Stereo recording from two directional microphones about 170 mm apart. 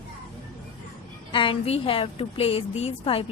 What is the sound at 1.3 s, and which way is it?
A woman's voice, 30° left (ahead or behind).